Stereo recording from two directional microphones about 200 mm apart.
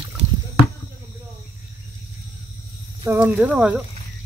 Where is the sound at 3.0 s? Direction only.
10° right (ahead or behind).